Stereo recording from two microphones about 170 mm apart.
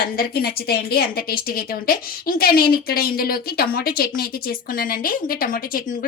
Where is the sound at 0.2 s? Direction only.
65° left (ahead or behind).